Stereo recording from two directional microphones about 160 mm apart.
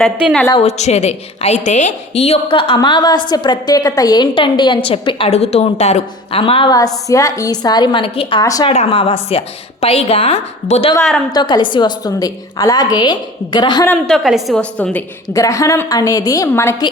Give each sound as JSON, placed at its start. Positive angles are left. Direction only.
{"t": 0.0, "sound": "a woman's voice", "side_deg": -5}
{"t": 0.5, "sound": "a woman's voice", "side_deg": 45}
{"t": 8.4, "sound": "a woman's voice", "side_deg": 25}
{"t": 8.7, "sound": "a woman's voice", "side_deg": 40}
{"t": 11.3, "sound": "a woman's voice", "side_deg": 25}
{"t": 14.1, "sound": "a woman's voice", "side_deg": 0}